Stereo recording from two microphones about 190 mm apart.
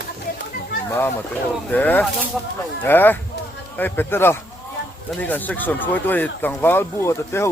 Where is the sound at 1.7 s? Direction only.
10° left (ahead or behind).